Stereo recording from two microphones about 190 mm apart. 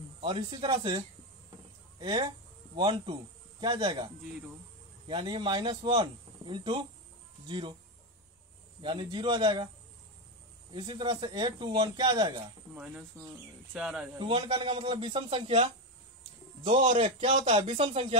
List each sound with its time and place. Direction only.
0.2 s speech: 25° right (ahead or behind)
8.8 s speech: 25° right (ahead or behind)
10.7 s speech: 25° right (ahead or behind)
12.7 s speech: 5° right (ahead or behind)
14.1 s speech: 25° right (ahead or behind)